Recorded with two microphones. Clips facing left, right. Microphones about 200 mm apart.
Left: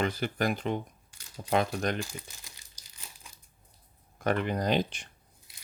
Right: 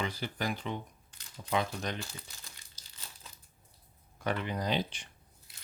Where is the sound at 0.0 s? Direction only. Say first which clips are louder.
Left 6 dB; 50° left (ahead or behind).